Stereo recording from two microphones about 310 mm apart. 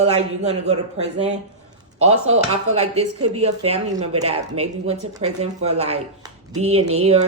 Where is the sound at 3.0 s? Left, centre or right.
Right.